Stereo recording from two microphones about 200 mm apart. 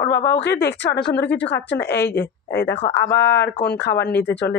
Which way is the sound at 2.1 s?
10° left (ahead or behind).